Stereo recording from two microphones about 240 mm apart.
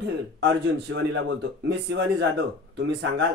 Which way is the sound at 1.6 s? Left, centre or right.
Right.